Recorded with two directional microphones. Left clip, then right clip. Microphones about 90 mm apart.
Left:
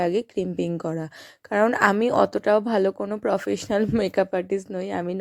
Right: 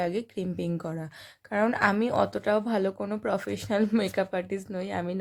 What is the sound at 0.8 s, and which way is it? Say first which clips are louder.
Speech: left 7 dB; 75° left (ahead or behind).